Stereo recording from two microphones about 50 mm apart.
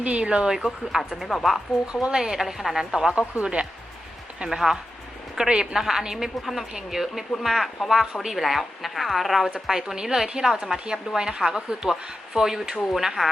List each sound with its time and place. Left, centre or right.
0.0 s speech: right
0.5 s a woman's voice: centre
1.9 s a woman's voice: centre
3.1 s speech: right
4.4 s a woman's voice: centre
12.7 s speech: centre